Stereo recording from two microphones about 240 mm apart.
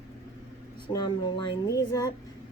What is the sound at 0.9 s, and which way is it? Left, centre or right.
Speech, centre.